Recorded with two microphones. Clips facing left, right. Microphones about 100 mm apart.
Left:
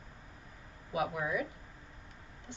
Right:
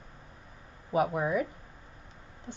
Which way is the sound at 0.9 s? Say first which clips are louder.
Right 6 dB; 35° right (ahead or behind).